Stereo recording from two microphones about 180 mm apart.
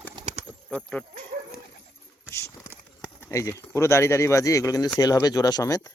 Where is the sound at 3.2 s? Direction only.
15° left (ahead or behind).